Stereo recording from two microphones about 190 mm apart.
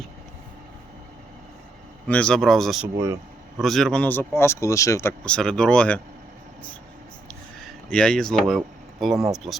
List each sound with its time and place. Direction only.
2.0 s speech: 5° left (ahead or behind)
7.3 s speech: 5° left (ahead or behind)